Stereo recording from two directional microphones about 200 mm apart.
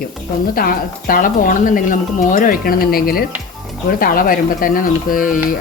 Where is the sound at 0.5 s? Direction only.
45° left (ahead or behind).